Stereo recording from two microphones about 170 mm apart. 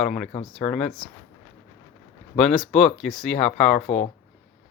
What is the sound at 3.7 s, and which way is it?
Speech, 45° left (ahead or behind).